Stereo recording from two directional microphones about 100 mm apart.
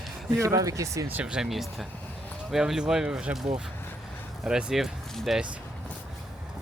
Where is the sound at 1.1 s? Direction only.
10° right (ahead or behind).